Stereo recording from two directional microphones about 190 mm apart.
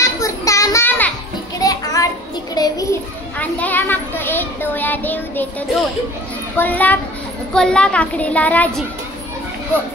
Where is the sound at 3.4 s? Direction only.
10° left (ahead or behind).